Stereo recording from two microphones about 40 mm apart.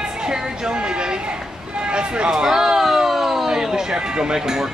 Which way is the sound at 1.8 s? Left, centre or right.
Right.